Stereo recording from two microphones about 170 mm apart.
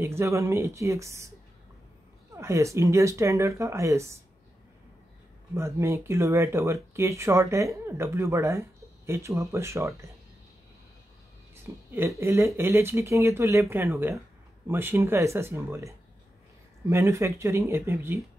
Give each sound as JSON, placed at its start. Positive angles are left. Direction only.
{"t": 0.0, "sound": "speech", "side_deg": -15}
{"t": 2.3, "sound": "speech", "side_deg": -15}
{"t": 5.6, "sound": "speech", "side_deg": -15}
{"t": 11.5, "sound": "a sound", "side_deg": -15}
{"t": 12.2, "sound": "speech", "side_deg": -15}
{"t": 16.9, "sound": "speech", "side_deg": -15}